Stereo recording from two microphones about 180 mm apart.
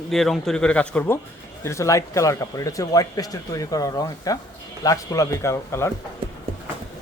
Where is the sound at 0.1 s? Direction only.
Centre (ahead or behind).